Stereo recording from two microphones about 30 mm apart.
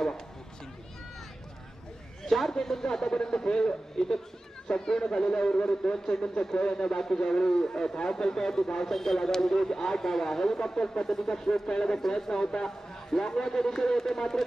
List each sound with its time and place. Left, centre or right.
2.2 s a man's voice: centre; by 11.1 s left
11.1 s a man's voice: centre
11.4 s a man's voice: left